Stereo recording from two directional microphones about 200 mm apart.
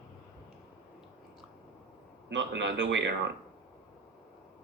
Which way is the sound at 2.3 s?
65° right (ahead or behind).